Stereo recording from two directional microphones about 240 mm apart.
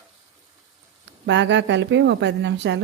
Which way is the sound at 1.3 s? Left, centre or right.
Right.